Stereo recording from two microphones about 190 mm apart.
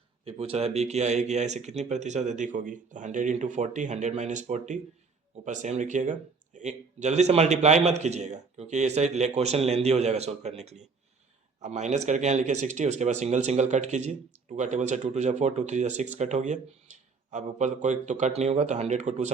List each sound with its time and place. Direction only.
0.3 s speech: 30° right (ahead or behind)